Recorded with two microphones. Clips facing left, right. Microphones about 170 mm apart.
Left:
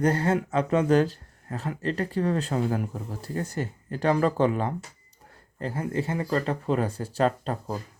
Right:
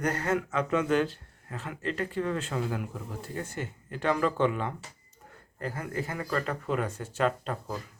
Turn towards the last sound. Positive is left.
turn(degrees=35)  # may be behind; listen again after turning